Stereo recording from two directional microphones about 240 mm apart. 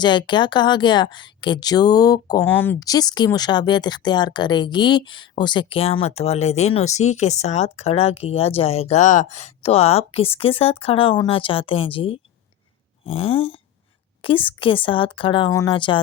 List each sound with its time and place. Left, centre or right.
0.0 s speech: centre